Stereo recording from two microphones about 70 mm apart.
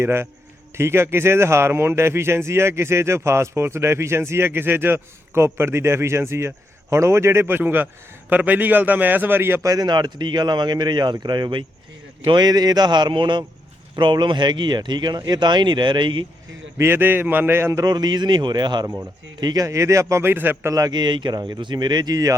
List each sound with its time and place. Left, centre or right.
0.0 s a man's voice: right
9.6 s speech: right
12.3 s speech: right
16.7 s a man's voice: right
17.7 s speech: right
19.4 s speech: right
19.6 s speech: right
20.2 s a man's voice: right
20.7 s speech: right